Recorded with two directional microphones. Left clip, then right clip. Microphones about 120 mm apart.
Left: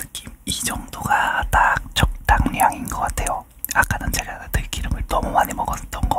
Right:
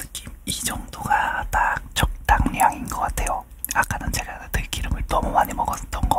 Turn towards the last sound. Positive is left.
turn(degrees=10)  # may be behind; listen again after turning